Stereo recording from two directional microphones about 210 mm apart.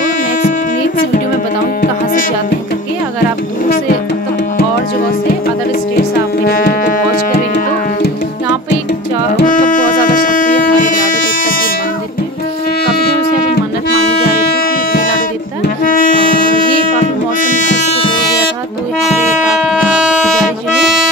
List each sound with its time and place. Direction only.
6.4 s music: 45° left (ahead or behind)
9.4 s music: 40° left (ahead or behind)
12.8 s shofar: 45° left (ahead or behind)
14.6 s music: 40° left (ahead or behind)
19.7 s music: 5° right (ahead or behind)